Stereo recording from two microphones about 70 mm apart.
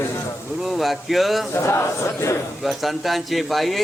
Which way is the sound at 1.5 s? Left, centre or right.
Left.